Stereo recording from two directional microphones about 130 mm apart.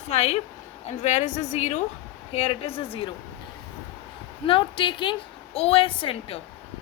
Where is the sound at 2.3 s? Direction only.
50° left (ahead or behind).